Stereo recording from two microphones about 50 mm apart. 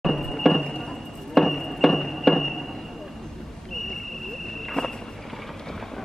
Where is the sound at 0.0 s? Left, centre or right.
Centre.